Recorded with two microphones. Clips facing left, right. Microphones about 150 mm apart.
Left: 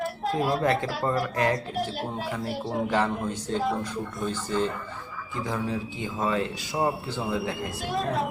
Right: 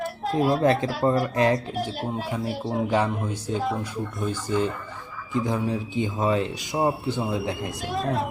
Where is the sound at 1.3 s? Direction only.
20° right (ahead or behind).